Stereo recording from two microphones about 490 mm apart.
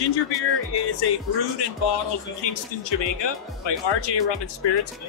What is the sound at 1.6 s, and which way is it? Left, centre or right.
Speech, left.